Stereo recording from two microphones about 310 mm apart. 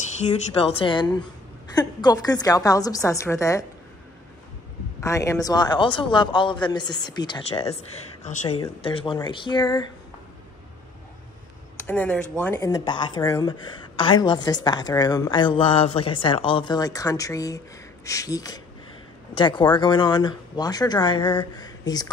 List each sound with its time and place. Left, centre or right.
0.2 s a woman's voice: centre
5.0 s a woman's voice: centre
11.7 s a woman's voice: centre